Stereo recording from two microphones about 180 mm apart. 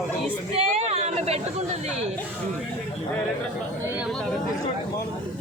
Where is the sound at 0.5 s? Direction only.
35° right (ahead or behind).